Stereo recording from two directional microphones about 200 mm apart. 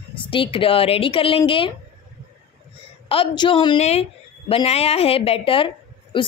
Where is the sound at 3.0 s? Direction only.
25° left (ahead or behind).